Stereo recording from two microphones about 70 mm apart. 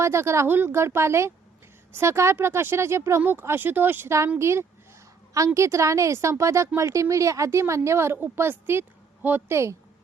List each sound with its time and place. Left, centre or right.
0.0 s speech: right
3.2 s speech: right
4.4 s a woman's voice: right